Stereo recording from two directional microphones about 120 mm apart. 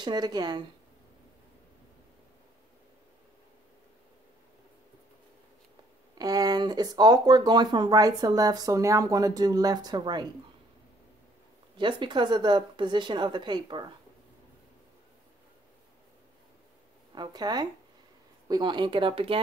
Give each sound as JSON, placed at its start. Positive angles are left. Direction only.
{"t": 0.0, "sound": "speech", "side_deg": -35}
{"t": 6.1, "sound": "speech", "side_deg": -30}
{"t": 11.8, "sound": "speech", "side_deg": -40}
{"t": 17.1, "sound": "speech", "side_deg": -35}